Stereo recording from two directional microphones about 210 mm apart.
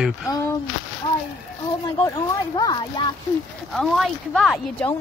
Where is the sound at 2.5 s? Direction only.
20° left (ahead or behind).